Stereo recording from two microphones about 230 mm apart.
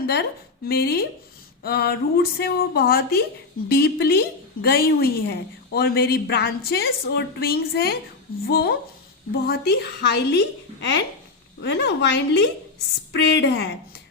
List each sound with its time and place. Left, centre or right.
0.1 s a woman's voice: left